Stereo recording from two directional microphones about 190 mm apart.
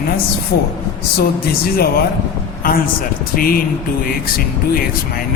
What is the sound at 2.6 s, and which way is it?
Speech, 50° left (ahead or behind).